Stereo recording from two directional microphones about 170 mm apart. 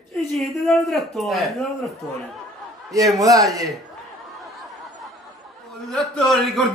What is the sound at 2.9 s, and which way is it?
Speech, 20° right (ahead or behind).